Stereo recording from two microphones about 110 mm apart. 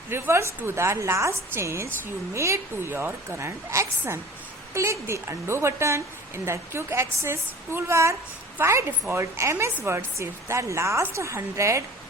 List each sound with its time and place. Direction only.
0.1 s a woman's voice: 25° right (ahead or behind)